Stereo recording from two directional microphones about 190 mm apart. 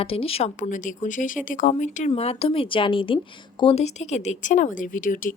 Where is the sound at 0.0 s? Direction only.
30° left (ahead or behind).